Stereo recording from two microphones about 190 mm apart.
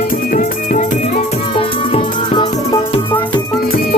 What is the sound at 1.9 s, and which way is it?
Music, 25° left (ahead or behind).